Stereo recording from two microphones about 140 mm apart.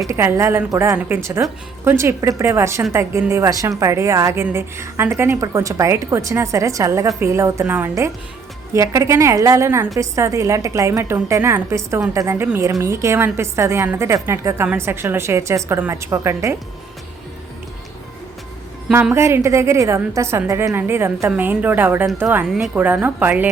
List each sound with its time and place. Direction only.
0.1 s a woman's voice: 20° right (ahead or behind)
18.9 s a woman's voice: 15° right (ahead or behind)